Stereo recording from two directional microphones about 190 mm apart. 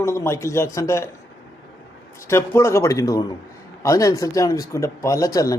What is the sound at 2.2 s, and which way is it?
A man's voice, 15° left (ahead or behind).